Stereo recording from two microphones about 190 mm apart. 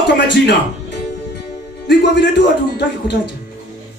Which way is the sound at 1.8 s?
65° left (ahead or behind).